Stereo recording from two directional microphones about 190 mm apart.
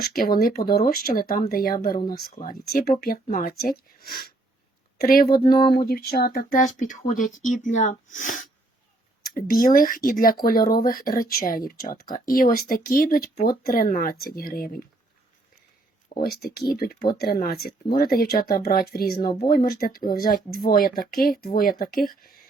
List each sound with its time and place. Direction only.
0.0 s speech: 50° left (ahead or behind)
4.9 s a woman's voice: 50° left (ahead or behind)
16.1 s speech: 55° left (ahead or behind)